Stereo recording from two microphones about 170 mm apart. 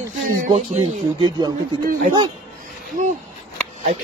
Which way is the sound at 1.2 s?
25° right (ahead or behind).